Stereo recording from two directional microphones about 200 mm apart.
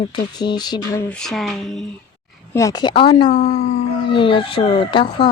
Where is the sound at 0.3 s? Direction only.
20° left (ahead or behind).